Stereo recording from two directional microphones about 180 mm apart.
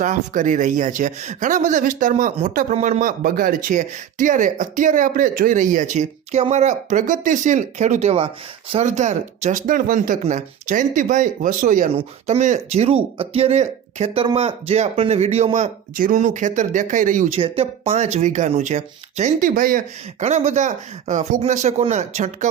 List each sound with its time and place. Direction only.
0.0 s a man's voice: 45° right (ahead or behind)
17.3 s speech: 35° right (ahead or behind)